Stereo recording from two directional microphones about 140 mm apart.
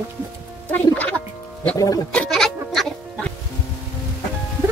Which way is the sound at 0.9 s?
10° left (ahead or behind).